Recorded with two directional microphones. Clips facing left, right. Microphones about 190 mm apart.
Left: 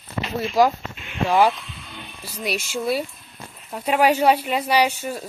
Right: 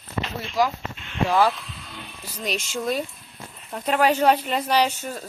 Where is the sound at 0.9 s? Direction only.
10° left (ahead or behind).